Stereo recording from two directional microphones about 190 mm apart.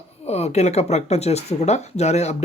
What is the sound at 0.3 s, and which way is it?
Speech, 35° left (ahead or behind).